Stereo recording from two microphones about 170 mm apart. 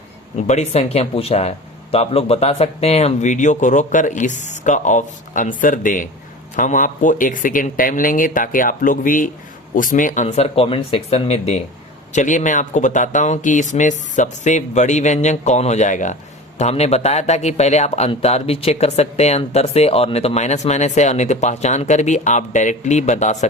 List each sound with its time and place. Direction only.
0.3 s speech: 40° left (ahead or behind)